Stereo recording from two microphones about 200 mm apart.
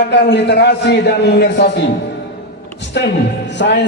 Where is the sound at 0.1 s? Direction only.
60° left (ahead or behind).